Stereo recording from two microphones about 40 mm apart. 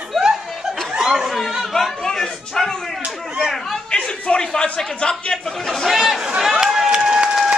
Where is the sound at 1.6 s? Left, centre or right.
Centre.